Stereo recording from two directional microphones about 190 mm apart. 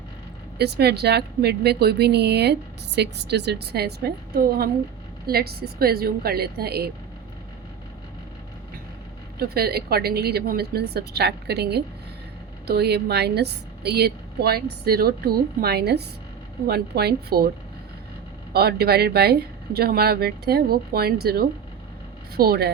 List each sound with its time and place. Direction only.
0.6 s a woman's voice: 60° right (ahead or behind)
9.4 s a woman's voice: 55° right (ahead or behind)
18.5 s a woman's voice: 55° right (ahead or behind)